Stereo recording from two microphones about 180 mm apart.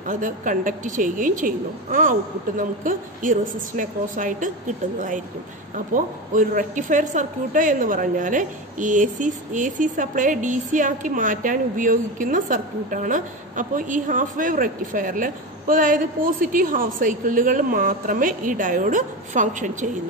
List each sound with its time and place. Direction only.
0.1 s a woman's voice: 45° right (ahead or behind)